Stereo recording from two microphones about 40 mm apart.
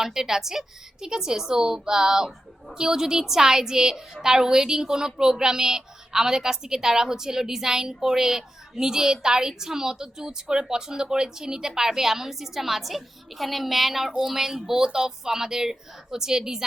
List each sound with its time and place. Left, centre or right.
0.0 s a woman's voice: centre